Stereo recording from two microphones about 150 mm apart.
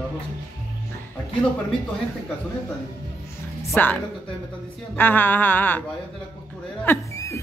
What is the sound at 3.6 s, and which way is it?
Speech, 10° left (ahead or behind).